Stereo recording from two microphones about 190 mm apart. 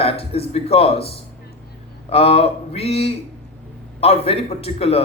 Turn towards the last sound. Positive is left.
turn(degrees=30)  # may be behind; listen again after turning